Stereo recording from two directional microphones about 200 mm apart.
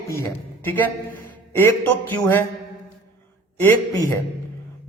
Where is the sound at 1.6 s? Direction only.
10° left (ahead or behind).